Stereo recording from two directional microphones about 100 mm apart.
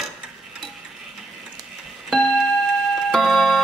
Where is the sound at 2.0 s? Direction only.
Centre (ahead or behind).